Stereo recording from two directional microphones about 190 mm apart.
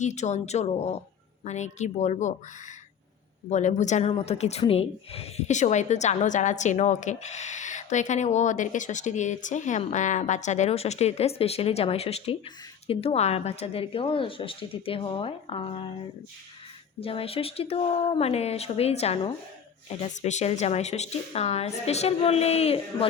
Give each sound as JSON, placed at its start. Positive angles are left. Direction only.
{"t": 0.0, "sound": "speech", "side_deg": 35}
{"t": 3.5, "sound": "speech", "side_deg": 40}
{"t": 17.0, "sound": "speech", "side_deg": 30}